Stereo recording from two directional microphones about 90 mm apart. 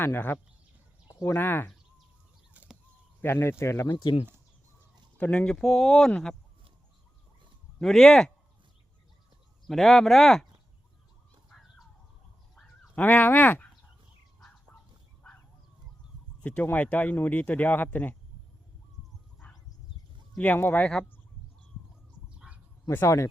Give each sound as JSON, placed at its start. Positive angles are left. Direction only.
{"t": 0.0, "sound": "speech", "side_deg": 25}
{"t": 3.2, "sound": "speech", "side_deg": 25}
{"t": 3.9, "sound": "speech", "side_deg": 65}
{"t": 5.1, "sound": "speech", "side_deg": 15}
{"t": 5.5, "sound": "speech", "side_deg": 5}
{"t": 7.8, "sound": "speech", "side_deg": 5}
{"t": 9.6, "sound": "speech", "side_deg": 5}
{"t": 12.5, "sound": "a sound", "side_deg": 5}
{"t": 13.0, "sound": "speech", "side_deg": 20}
{"t": 16.4, "sound": "speech", "side_deg": 15}
{"t": 20.3, "sound": "speech", "side_deg": 20}
{"t": 22.4, "sound": "a sound", "side_deg": -10}
{"t": 22.9, "sound": "speech", "side_deg": 30}